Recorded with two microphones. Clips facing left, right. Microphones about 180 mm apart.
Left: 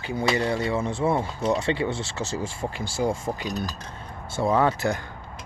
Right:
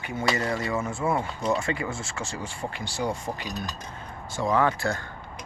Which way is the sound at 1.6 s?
30° left (ahead or behind).